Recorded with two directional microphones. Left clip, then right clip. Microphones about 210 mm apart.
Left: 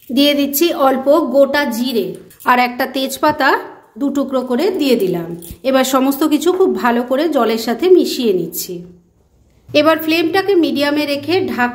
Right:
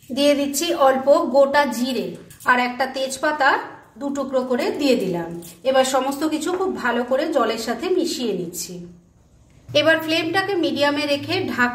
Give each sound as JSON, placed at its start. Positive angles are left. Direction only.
{"t": 0.1, "sound": "a woman's voice", "side_deg": 40}
{"t": 9.7, "sound": "a woman's voice", "side_deg": 35}